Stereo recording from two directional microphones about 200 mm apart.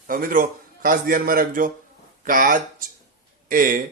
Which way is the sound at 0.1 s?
45° right (ahead or behind).